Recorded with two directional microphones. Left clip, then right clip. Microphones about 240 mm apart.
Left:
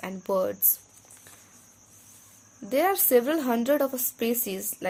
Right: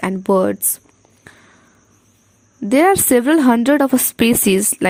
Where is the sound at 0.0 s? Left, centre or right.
Right.